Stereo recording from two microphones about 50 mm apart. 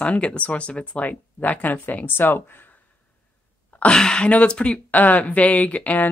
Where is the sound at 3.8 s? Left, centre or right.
Centre.